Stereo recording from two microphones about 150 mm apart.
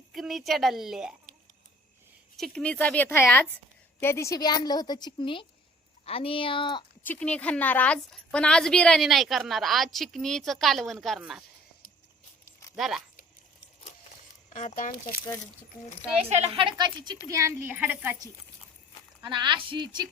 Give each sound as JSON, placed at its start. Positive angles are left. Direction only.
{"t": 0.1, "sound": "a woman's voice", "side_deg": 0}
{"t": 2.3, "sound": "a woman's voice", "side_deg": 5}
{"t": 7.1, "sound": "a woman's voice", "side_deg": 10}
{"t": 12.7, "sound": "speech", "side_deg": 0}
{"t": 14.5, "sound": "speech", "side_deg": 60}
{"t": 16.3, "sound": "a woman's voice", "side_deg": -45}
{"t": 19.2, "sound": "a woman's voice", "side_deg": -30}